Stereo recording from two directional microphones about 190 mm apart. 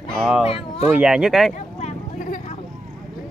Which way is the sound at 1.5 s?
45° left (ahead or behind).